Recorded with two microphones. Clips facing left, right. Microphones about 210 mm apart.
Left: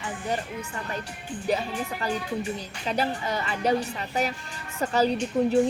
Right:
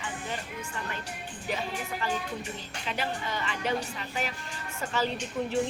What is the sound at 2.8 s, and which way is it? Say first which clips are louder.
A woman's voice: left 6 dB; 40° left (ahead or behind).